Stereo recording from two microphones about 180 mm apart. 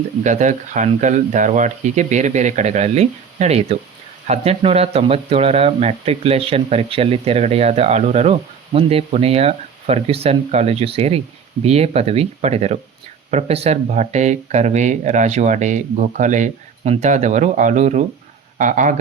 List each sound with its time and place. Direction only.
0.2 s speech: 40° right (ahead or behind)